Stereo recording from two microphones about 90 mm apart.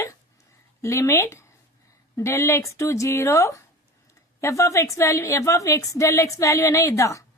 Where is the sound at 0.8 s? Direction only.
35° left (ahead or behind).